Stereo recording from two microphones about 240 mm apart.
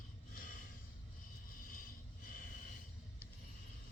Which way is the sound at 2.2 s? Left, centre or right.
Left.